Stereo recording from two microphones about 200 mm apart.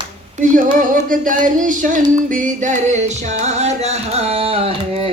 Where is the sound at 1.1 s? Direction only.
40° right (ahead or behind).